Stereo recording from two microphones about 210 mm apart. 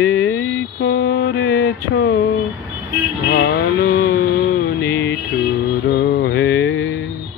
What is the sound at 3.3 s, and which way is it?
Vehicle, 55° left (ahead or behind).